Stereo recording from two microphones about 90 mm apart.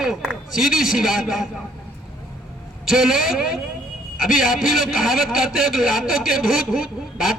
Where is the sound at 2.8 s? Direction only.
5° right (ahead or behind).